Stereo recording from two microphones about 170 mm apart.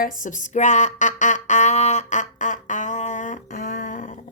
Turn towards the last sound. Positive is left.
turn(degrees=50)  # may be behind; listen again after turning